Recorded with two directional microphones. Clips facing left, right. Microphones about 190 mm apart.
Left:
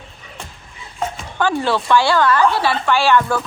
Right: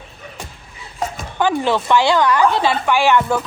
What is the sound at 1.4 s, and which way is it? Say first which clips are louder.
A woman's voice: right 1 dB; 15° right (ahead or behind).